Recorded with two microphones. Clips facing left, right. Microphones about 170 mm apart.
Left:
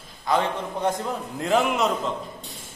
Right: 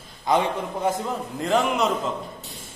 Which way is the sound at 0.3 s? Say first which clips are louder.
Right 2 dB; 20° right (ahead or behind).